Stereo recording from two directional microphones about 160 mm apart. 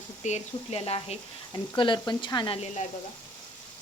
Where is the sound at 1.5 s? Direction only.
30° left (ahead or behind).